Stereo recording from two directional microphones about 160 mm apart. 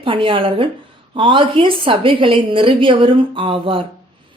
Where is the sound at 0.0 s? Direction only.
35° right (ahead or behind).